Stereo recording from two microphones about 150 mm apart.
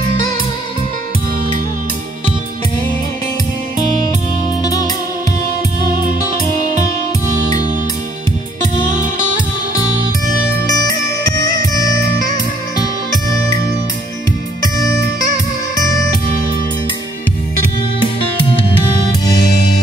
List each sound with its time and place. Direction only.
4.6 s music: 25° left (ahead or behind)
7.2 s music: 60° right (ahead or behind)
10.7 s music: 25° left (ahead or behind)
14.6 s music: 25° left (ahead or behind)